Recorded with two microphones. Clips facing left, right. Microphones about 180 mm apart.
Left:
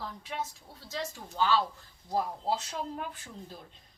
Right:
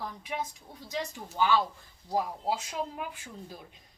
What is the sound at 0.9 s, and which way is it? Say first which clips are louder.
A woman's voice: right 2 dB; 15° right (ahead or behind).